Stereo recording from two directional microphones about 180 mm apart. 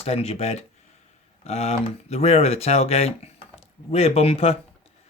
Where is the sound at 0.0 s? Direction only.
35° left (ahead or behind).